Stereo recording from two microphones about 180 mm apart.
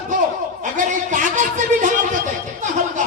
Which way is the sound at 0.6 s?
45° right (ahead or behind).